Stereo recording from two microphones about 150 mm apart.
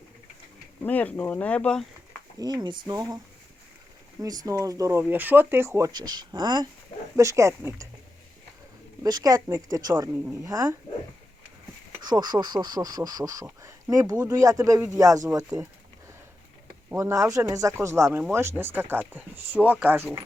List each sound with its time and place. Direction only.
0.8 s speech: 10° left (ahead or behind)
2.4 s speech: 30° right (ahead or behind)
4.2 s speech: 25° right (ahead or behind)
9.0 s speech: 25° right (ahead or behind)
12.0 s speech: 30° right (ahead or behind)
16.9 s speech: 20° right (ahead or behind)